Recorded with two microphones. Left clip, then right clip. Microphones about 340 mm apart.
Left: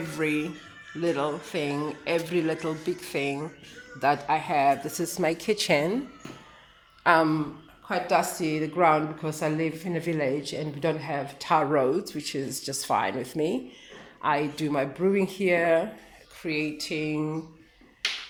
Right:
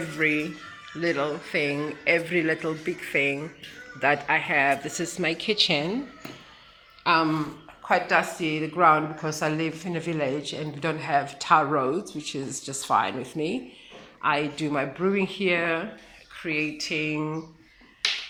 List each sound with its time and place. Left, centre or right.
0.2 s a man's voice: centre
7.0 s speech: left
7.9 s a woman's voice: centre
8.1 s a man's voice: centre